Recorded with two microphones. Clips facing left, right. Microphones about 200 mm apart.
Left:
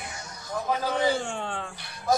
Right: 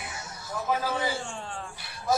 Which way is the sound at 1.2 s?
65° left (ahead or behind).